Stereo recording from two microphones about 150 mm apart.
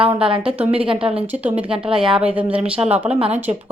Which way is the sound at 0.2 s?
35° right (ahead or behind).